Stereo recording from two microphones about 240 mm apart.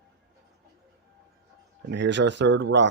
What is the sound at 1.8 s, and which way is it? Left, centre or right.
Speech, right.